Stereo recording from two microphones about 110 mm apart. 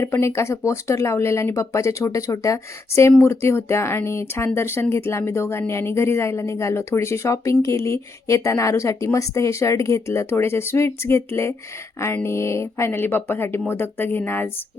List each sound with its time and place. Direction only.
0.0 s a woman's voice: 25° left (ahead or behind)